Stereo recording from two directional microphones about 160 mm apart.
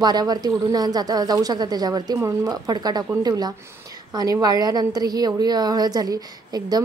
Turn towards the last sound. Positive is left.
turn(degrees=-25)  # may be behind; listen again after turning